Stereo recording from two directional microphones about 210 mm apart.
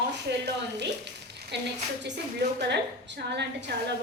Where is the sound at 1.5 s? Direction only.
55° right (ahead or behind).